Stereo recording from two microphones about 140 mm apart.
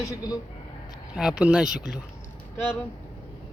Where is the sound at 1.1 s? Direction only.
5° right (ahead or behind).